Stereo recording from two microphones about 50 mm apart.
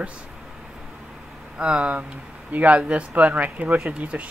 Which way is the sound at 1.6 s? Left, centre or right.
Right.